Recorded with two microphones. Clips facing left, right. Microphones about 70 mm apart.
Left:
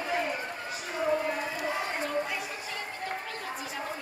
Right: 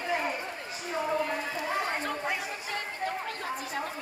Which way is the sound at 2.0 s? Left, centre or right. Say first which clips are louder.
Left 1 dB; right.